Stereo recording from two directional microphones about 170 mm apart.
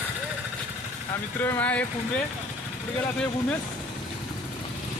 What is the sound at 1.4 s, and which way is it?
Speech, 10° left (ahead or behind).